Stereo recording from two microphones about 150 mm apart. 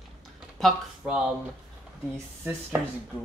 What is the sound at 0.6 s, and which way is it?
Speech, centre (ahead or behind).